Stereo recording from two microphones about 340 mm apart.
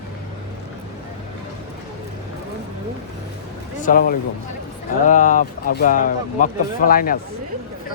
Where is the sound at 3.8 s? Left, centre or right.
Left.